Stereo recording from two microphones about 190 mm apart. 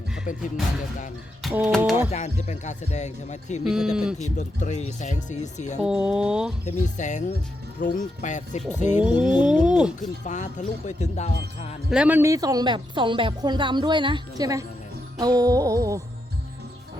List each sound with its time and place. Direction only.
0.3 s music: 45° left (ahead or behind)
1.4 s a sound: centre (ahead or behind)
1.8 s music: 10° right (ahead or behind)
2.0 s speech: 35° left (ahead or behind)
3.6 s speech: centre (ahead or behind)
4.2 s speech: 40° left (ahead or behind)
5.8 s speech: 5° right (ahead or behind)
6.7 s speech: 40° left (ahead or behind)
9.0 s music: 5° right (ahead or behind)
9.2 s a sound: 20° left (ahead or behind)
9.5 s speech: 5° right (ahead or behind)
10.0 s speech: 40° left (ahead or behind)
11.9 s speech: 5° right (ahead or behind)